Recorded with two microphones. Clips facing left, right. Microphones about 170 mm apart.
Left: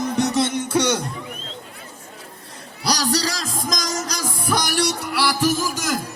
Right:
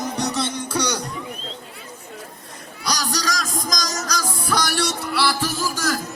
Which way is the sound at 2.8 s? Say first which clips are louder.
Left 3 dB; 30° left (ahead or behind).